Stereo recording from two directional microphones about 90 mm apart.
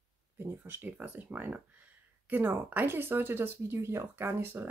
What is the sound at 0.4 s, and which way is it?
Speech, 20° right (ahead or behind).